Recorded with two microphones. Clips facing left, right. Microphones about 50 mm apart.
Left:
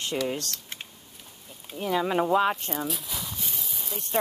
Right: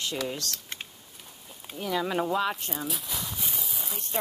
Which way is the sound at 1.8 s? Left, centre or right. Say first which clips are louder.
Left 3 dB; centre.